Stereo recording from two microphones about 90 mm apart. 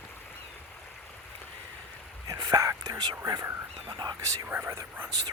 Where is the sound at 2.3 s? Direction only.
40° right (ahead or behind).